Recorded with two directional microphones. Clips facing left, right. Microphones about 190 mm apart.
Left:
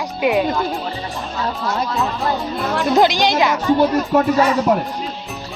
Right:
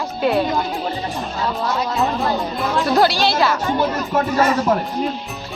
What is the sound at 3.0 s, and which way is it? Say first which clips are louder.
Speech: left 2 dB; 15° left (ahead or behind).